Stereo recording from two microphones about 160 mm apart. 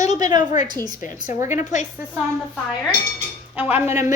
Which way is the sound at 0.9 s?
55° left (ahead or behind).